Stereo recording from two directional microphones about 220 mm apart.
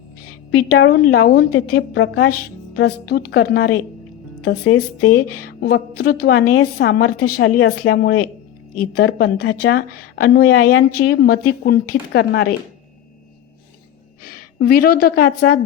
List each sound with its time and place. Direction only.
0.5 s a woman's voice: 90° left
0.9 s a woman's voice: 45° left (ahead or behind)
5.0 s a woman's voice: 45° left (ahead or behind)
10.5 s a woman's voice: 85° left
10.9 s a woman's voice: 45° left (ahead or behind)
14.3 s a woman's voice: 45° left (ahead or behind)